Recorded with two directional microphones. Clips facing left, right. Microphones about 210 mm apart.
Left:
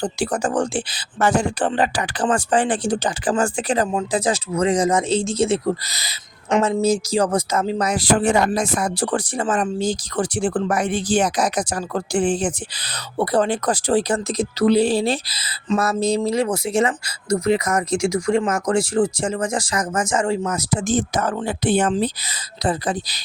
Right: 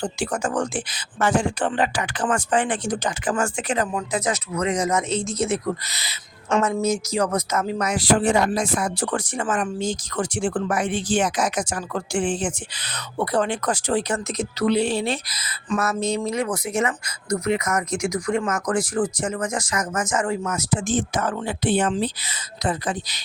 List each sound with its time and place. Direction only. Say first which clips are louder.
0.0 s speech: left 3 dB; 35° left (ahead or behind)
6.6 s speech: left 4 dB; 25° left (ahead or behind)